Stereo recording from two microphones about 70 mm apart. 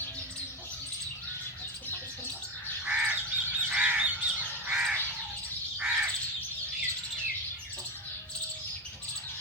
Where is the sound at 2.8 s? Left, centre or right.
Centre.